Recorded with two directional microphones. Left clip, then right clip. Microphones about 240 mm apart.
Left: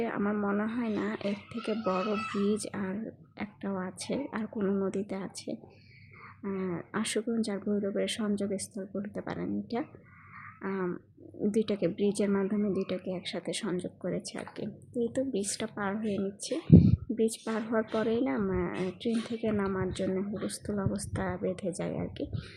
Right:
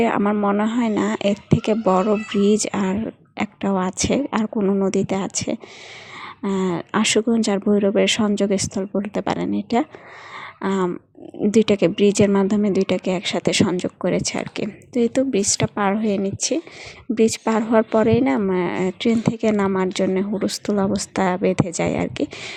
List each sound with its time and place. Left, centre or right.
0.0 s speech: right